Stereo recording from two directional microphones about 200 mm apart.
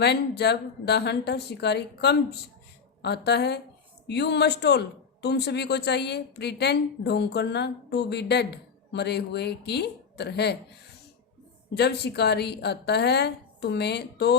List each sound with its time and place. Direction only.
0.0 s speech: 55° left (ahead or behind)
11.7 s speech: 55° left (ahead or behind)